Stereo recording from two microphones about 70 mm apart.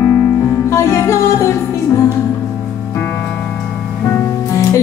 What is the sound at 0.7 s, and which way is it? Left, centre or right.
Music, left.